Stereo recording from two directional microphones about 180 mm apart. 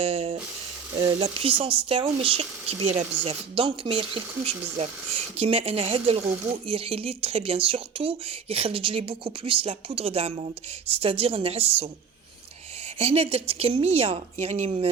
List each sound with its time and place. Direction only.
0.0 s speech: 30° right (ahead or behind)
13.0 s speech: 35° right (ahead or behind)